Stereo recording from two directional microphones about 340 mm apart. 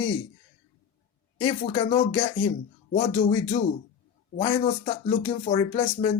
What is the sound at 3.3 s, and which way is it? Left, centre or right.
Speech, centre.